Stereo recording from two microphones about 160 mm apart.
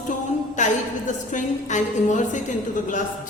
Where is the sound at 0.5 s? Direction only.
50° left (ahead or behind).